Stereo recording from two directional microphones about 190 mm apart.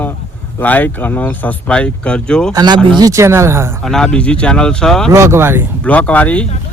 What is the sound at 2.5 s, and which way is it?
Speech, 20° right (ahead or behind).